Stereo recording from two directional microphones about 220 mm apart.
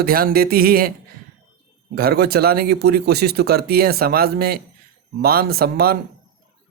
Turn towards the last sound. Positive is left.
turn(degrees=-45)  # may be behind; listen again after turning